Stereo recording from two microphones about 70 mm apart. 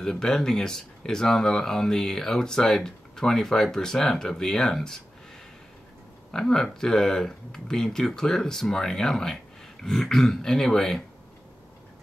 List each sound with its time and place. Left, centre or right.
0.0 s speech: centre
6.3 s speech: centre